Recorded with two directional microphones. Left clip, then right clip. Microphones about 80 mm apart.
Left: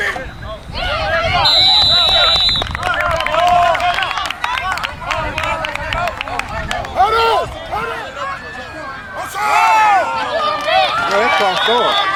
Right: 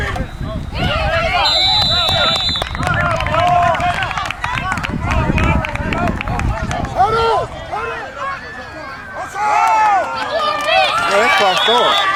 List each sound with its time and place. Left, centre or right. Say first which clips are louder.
1.2 s a sound: left 3 dB; centre
2.9 s run: left 1 dB; left
9.4 s a sound: left 1 dB; left
10.3 s run: right 1 dB; centre
11.3 s run: right 1 dB; centre
11.7 s run: right 1 dB; right